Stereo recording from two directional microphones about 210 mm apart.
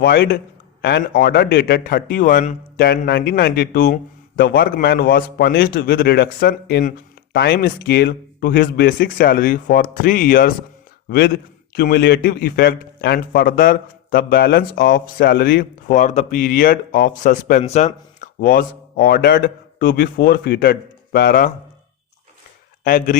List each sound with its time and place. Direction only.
0.0 s a man's voice: 45° left (ahead or behind)
11.7 s a man's voice: 45° left (ahead or behind)
22.8 s a man's voice: 40° left (ahead or behind)